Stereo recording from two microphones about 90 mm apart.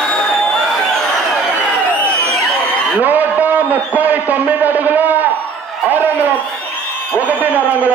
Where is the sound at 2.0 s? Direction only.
15° left (ahead or behind).